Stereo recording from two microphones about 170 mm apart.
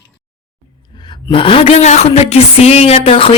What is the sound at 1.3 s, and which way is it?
Speech, 30° left (ahead or behind).